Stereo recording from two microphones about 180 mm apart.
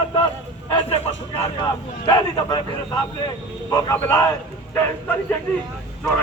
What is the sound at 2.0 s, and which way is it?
A man's voice, 20° left (ahead or behind).